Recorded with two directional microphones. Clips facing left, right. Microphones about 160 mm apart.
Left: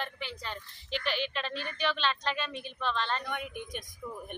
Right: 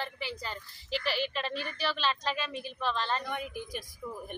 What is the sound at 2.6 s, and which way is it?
Female singing, 5° right (ahead or behind).